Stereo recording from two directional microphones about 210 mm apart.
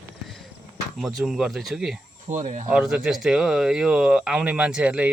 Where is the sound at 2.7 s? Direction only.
5° right (ahead or behind).